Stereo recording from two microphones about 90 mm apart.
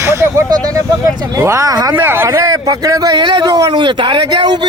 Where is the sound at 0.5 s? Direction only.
45° right (ahead or behind).